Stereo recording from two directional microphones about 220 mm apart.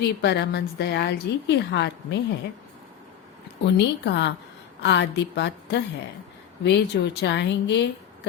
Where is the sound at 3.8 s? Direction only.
50° left (ahead or behind).